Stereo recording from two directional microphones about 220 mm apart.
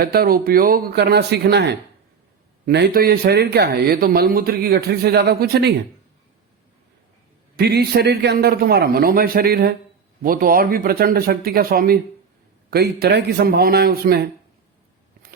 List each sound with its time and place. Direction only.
0.0 s speech: 45° right (ahead or behind)
7.5 s speech: 45° right (ahead or behind)